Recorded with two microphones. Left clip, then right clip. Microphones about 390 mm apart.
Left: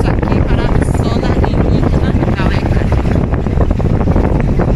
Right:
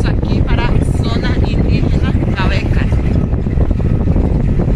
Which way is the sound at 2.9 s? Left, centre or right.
Left.